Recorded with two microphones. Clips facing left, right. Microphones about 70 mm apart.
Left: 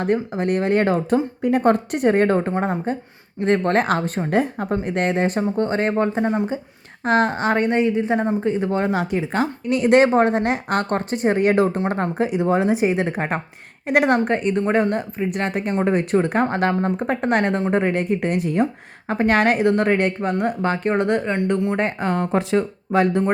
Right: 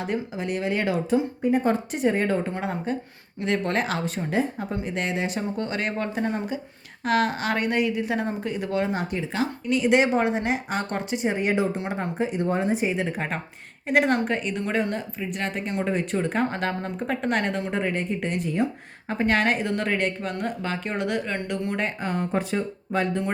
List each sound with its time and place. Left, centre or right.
0.0 s a woman's voice: left
1.4 s speech: left
2.5 s a woman's voice: left
8.9 s speech: left
9.3 s a woman's voice: left
21.2 s speech: left
21.8 s speech: left